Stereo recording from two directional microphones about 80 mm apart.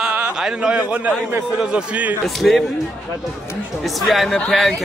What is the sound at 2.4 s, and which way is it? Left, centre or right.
Speech, centre.